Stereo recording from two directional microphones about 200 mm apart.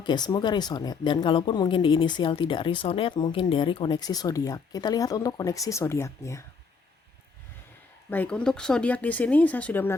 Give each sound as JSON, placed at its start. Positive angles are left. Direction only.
{"t": 0.0, "sound": "speech", "side_deg": 20}
{"t": 8.1, "sound": "speech", "side_deg": 5}